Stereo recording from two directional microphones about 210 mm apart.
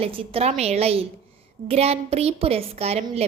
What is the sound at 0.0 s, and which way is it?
A woman's voice, 25° right (ahead or behind).